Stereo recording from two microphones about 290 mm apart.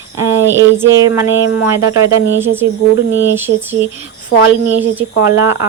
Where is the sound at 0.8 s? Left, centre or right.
Centre.